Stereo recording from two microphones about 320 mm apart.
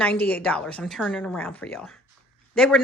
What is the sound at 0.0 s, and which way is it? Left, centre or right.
Speech, centre.